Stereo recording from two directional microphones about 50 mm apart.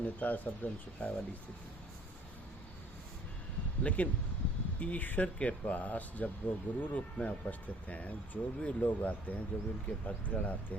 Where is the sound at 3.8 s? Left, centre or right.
Left.